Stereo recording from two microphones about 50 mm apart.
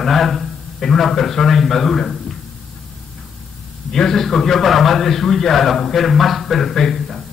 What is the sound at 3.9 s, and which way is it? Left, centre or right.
A man's voice, centre.